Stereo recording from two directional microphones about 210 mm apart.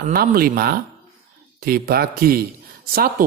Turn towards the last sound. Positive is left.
turn(degrees=-45)  # may be behind; listen again after turning